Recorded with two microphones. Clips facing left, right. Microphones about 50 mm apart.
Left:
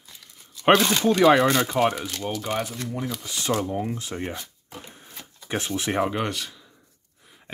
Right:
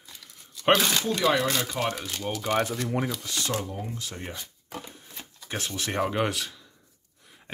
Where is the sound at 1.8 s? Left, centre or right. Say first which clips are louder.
Left 8 dB; left.